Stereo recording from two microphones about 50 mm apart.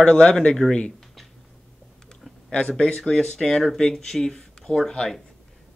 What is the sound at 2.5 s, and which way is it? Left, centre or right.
Speech, left.